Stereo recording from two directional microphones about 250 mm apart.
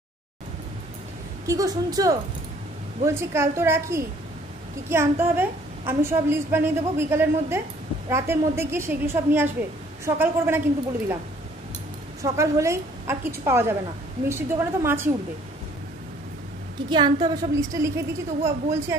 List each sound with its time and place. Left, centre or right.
1.5 s a woman's voice: centre
12.2 s a woman's voice: centre
16.9 s a woman's voice: centre